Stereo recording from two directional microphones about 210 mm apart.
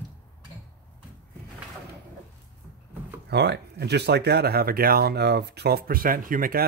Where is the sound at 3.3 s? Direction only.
55° right (ahead or behind).